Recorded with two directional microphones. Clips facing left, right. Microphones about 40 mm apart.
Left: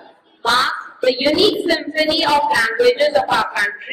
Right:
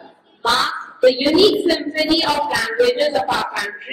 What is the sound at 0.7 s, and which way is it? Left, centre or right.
A woman's voice, centre.